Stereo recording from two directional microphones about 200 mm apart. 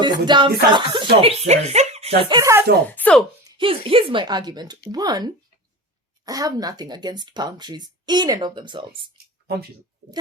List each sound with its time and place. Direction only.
0.0 s speech: 25° right (ahead or behind)
2.4 s speech: 15° right (ahead or behind)
2.9 s speech: 5° left (ahead or behind)
3.4 s speech: 25° right (ahead or behind)
8.9 s a sound: 50° right (ahead or behind)